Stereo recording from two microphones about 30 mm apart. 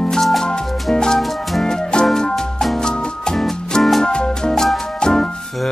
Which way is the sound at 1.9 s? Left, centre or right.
Left.